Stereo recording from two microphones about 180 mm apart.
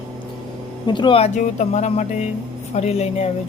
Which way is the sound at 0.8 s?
25° left (ahead or behind).